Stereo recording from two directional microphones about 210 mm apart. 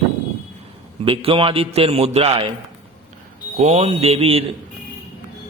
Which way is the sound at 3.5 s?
30° right (ahead or behind).